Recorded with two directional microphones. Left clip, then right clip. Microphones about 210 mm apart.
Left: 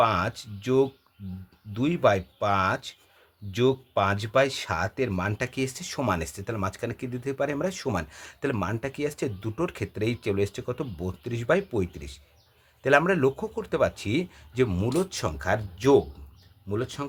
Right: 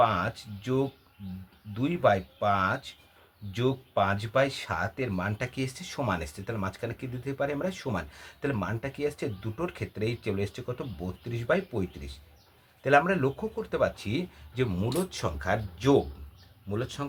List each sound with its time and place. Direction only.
0.0 s speech: 50° left (ahead or behind)